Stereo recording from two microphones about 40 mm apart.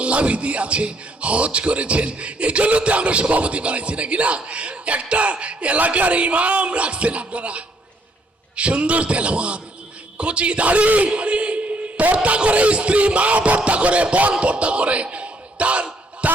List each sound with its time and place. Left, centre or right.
0.0 s a man's voice: right